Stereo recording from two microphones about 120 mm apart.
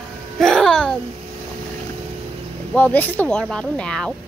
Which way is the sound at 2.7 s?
15° left (ahead or behind).